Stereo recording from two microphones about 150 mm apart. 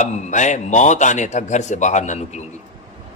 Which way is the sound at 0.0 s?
55° left (ahead or behind).